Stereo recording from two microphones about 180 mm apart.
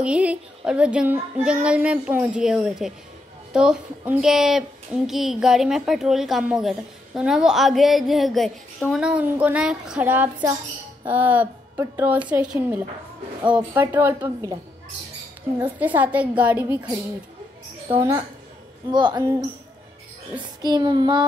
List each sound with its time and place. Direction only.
0.0 s child singing: 5° right (ahead or behind)
3.5 s speech: 5° right (ahead or behind)
8.9 s child singing: 5° right (ahead or behind)
18.9 s child singing: 25° right (ahead or behind)
20.6 s child singing: 25° right (ahead or behind)